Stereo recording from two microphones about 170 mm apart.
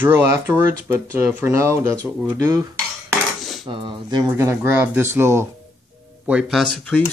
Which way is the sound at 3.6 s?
30° right (ahead or behind).